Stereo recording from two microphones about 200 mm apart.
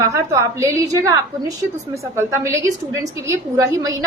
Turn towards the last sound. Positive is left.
turn(degrees=-15)  # may be behind; listen again after turning